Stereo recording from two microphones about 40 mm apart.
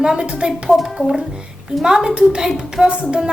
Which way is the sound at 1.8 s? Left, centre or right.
Right.